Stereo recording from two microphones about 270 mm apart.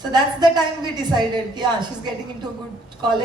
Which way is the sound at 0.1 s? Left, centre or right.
Centre.